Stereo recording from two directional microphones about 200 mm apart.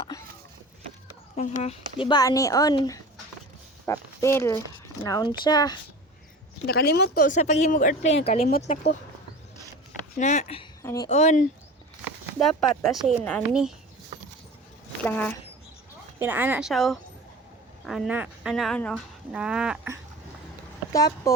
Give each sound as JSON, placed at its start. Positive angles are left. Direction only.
{"t": 1.4, "sound": "speech", "side_deg": 30}
{"t": 2.0, "sound": "speech", "side_deg": 20}
{"t": 6.7, "sound": "speech", "side_deg": 50}
{"t": 10.2, "sound": "speech", "side_deg": 35}
{"t": 10.8, "sound": "speech", "side_deg": 15}
{"t": 11.1, "sound": "speech", "side_deg": 35}
{"t": 12.0, "sound": "speech", "side_deg": 0}
{"t": 15.0, "sound": "speech", "side_deg": 10}
{"t": 16.1, "sound": "speech", "side_deg": -10}
{"t": 20.9, "sound": "speech", "side_deg": 15}